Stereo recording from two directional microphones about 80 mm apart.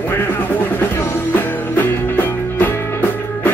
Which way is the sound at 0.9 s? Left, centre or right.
Left.